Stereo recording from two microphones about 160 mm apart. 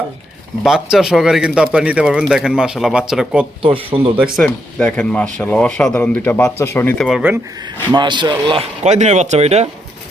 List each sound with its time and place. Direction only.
0.6 s speech: 5° right (ahead or behind)
3.6 s speech: 35° right (ahead or behind)
4.4 s speech: 10° left (ahead or behind)
7.1 s speech: 5° right (ahead or behind)
7.9 s speech: 30° right (ahead or behind)
8.8 s speech: 45° right (ahead or behind)